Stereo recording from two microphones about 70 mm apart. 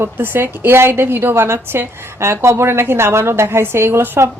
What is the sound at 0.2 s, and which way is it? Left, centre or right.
A woman's voice, right.